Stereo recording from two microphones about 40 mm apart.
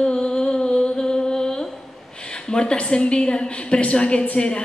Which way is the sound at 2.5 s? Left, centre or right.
Left.